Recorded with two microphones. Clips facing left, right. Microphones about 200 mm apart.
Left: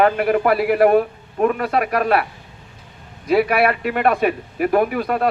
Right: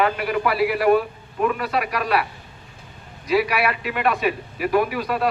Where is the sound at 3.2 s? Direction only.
55° left (ahead or behind).